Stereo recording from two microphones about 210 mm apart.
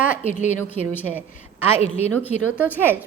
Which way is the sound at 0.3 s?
35° left (ahead or behind).